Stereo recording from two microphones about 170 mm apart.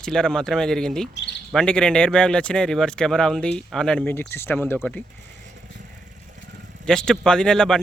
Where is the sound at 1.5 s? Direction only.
5° left (ahead or behind).